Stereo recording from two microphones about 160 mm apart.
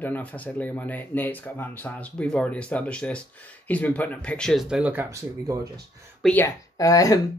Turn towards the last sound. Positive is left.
turn(degrees=20)  # may be behind; listen again after turning